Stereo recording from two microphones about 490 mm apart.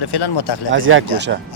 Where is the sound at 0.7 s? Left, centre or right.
Right.